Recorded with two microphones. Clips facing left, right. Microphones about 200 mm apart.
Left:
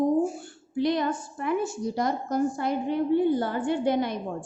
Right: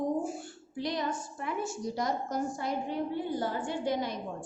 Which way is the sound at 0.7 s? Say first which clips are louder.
Left 8 dB; 60° left (ahead or behind).